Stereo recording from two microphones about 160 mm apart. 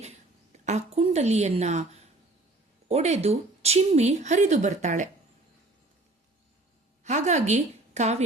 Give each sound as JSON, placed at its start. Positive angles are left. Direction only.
{"t": 0.6, "sound": "a woman's voice", "side_deg": -45}
{"t": 7.0, "sound": "a woman's voice", "side_deg": -45}